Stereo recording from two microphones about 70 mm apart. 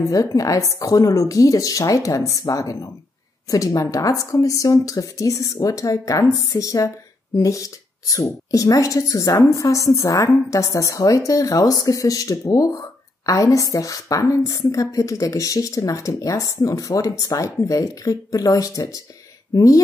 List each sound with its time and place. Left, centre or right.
0.1 s a woman's voice: left